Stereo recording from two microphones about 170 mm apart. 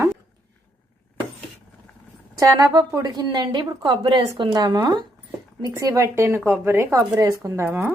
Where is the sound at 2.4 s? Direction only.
20° right (ahead or behind).